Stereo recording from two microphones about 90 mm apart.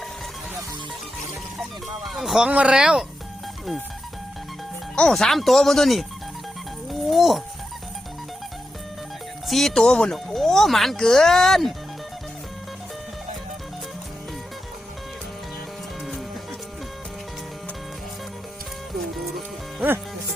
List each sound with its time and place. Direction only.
2.0 s speech: centre (ahead or behind)
2.5 s speech: 15° right (ahead or behind)
4.9 s speech: 5° left (ahead or behind)
7.1 s speech: centre (ahead or behind)
9.5 s speech: 5° left (ahead or behind)